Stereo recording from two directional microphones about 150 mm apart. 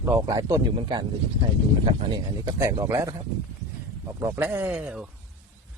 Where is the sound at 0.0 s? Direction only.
25° right (ahead or behind).